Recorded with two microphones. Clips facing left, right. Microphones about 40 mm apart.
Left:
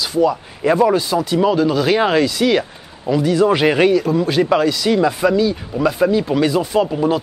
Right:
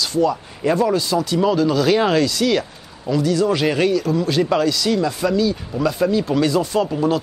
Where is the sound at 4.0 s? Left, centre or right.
Centre.